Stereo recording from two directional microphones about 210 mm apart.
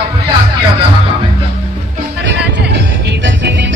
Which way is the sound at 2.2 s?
55° right (ahead or behind).